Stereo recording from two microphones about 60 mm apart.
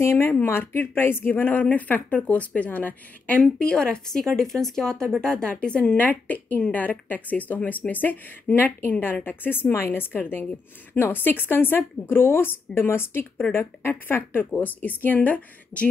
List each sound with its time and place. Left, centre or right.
0.0 s speech: left
3.5 s speech: centre